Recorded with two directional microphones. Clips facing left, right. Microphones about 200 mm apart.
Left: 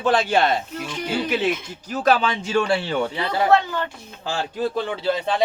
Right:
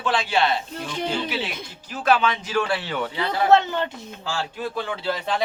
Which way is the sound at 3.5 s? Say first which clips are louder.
Right 3 dB; 20° right (ahead or behind).